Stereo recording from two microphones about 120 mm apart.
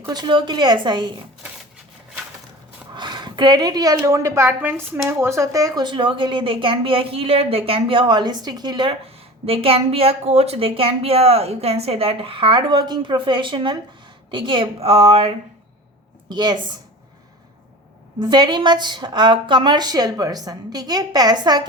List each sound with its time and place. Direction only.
0.1 s a woman's voice: 40° right (ahead or behind)
2.9 s a woman's voice: 40° right (ahead or behind)
9.5 s a woman's voice: 50° right (ahead or behind)
16.3 s a woman's voice: 35° right (ahead or behind)
18.2 s a woman's voice: 35° right (ahead or behind)